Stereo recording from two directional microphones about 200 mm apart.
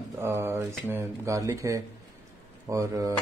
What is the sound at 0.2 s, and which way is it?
Speech, 15° right (ahead or behind).